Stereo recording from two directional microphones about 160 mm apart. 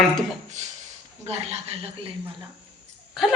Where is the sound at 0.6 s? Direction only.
45° right (ahead or behind).